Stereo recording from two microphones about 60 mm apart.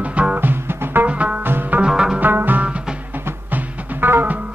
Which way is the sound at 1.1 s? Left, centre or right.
Right.